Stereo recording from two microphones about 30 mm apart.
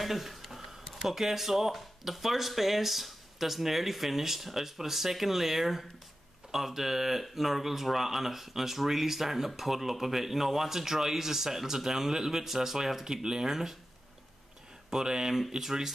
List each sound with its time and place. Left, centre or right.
0.0 s speech: centre
14.9 s speech: right